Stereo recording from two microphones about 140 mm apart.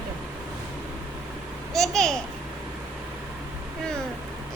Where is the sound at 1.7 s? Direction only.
Centre (ahead or behind).